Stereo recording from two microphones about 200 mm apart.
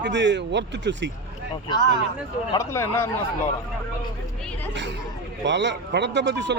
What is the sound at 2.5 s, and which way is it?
Speech, 15° left (ahead or behind).